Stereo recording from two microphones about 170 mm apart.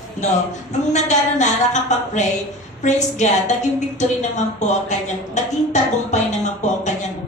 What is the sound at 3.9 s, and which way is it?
Speech, 45° left (ahead or behind).